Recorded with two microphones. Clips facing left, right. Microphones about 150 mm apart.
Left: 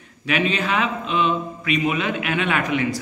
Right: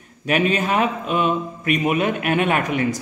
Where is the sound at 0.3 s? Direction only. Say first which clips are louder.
Right 3 dB; 45° right (ahead or behind).